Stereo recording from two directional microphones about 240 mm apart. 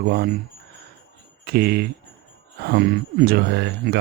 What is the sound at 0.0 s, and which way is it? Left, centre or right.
Speech, right.